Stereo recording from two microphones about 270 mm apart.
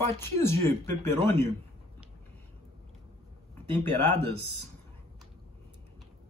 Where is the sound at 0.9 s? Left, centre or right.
Left.